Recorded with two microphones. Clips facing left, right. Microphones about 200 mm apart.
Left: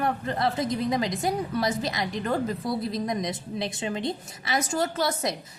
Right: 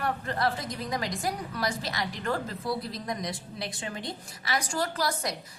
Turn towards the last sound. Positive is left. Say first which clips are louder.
# left 4 dB
turn(degrees=25)  # may be behind; listen again after turning